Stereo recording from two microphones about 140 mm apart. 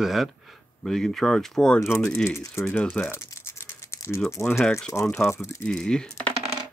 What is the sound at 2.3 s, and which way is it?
Speech, 20° left (ahead or behind).